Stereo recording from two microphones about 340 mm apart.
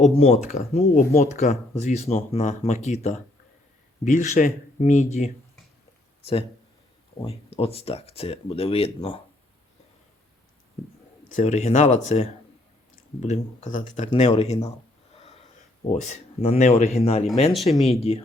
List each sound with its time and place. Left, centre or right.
0.1 s speech: centre
7.2 s speech: centre
11.3 s speech: centre
15.1 s snort: centre
15.9 s speech: centre
17.5 s speech: centre
17.8 s speech: centre